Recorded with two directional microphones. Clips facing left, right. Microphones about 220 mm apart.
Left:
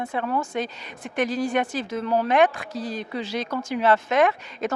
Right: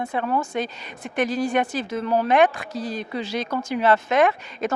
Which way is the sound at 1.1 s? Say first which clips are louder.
Right 1 dB; 10° right (ahead or behind).